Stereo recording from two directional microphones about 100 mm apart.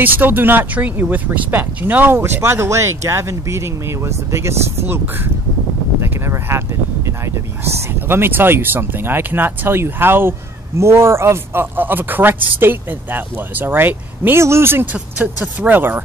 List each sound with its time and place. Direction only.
0.0 s speech: 20° right (ahead or behind)
8.1 s speech: 20° right (ahead or behind)